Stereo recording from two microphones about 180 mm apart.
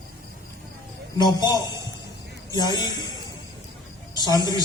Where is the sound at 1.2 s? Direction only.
20° left (ahead or behind).